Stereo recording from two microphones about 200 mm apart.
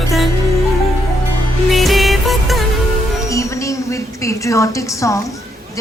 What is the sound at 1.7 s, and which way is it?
Music, centre (ahead or behind).